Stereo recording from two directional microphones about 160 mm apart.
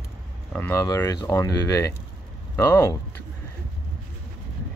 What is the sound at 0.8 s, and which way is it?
Speech, 20° left (ahead or behind).